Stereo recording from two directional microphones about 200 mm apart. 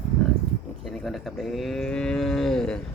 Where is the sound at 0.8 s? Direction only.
Centre (ahead or behind).